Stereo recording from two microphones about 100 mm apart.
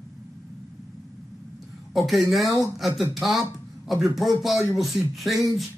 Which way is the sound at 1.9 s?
Centre (ahead or behind).